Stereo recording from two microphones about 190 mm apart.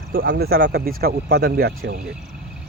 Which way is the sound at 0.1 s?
50° right (ahead or behind).